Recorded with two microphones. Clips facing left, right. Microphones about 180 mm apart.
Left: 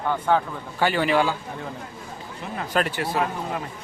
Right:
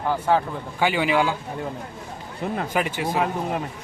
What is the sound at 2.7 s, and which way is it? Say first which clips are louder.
Speech: left 3 dB; 15° right (ahead or behind).